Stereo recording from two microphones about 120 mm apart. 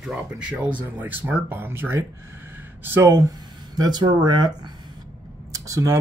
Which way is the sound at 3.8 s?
35° right (ahead or behind).